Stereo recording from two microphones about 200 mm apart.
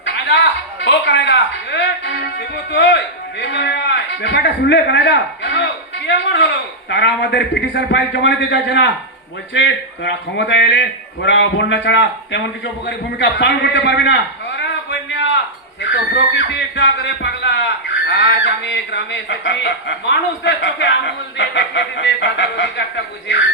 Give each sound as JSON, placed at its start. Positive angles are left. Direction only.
{"t": 0.0, "sound": "a man's voice", "side_deg": 65}
{"t": 14.8, "sound": "a sound", "side_deg": 60}
{"t": 15.8, "sound": "a man's voice", "side_deg": 60}